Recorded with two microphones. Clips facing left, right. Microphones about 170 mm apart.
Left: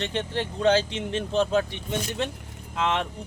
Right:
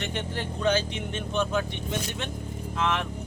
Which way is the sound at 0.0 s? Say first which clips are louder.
Left 4 dB; 25° left (ahead or behind).